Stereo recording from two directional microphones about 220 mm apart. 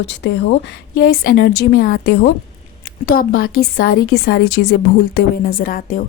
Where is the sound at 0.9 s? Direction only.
40° left (ahead or behind).